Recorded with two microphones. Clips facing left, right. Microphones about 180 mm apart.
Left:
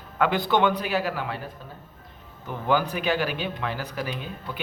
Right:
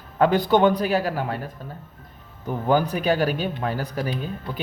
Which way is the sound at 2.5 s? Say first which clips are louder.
Right 3 dB; 40° right (ahead or behind).